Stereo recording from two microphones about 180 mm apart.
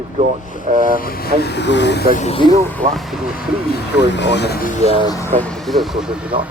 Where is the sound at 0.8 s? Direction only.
50° left (ahead or behind); by 2.1 s 75° left (ahead or behind).